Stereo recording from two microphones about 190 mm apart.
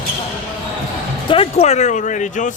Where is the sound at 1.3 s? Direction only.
30° left (ahead or behind).